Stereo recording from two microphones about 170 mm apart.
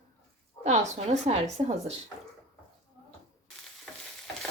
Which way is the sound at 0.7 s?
40° right (ahead or behind).